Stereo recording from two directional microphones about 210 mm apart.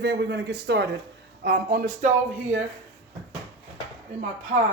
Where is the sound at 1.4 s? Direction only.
45° right (ahead or behind).